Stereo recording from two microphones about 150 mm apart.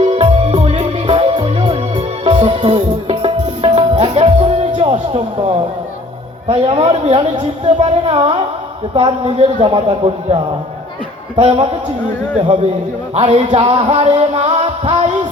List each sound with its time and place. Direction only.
0.0 s music: 40° right (ahead or behind)
6.5 s a woman's voice: 40° right (ahead or behind)
10.0 s music: 50° right (ahead or behind)
11.3 s a woman's voice: 40° right (ahead or behind)
13.1 s music: 50° right (ahead or behind)